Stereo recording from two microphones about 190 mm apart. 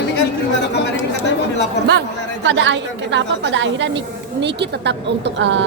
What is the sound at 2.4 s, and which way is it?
A woman's voice, 75° right (ahead or behind).